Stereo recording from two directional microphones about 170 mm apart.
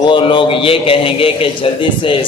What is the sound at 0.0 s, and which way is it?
A man's voice, 30° left (ahead or behind).